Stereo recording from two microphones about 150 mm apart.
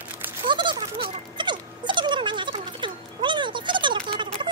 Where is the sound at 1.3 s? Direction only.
30° right (ahead or behind).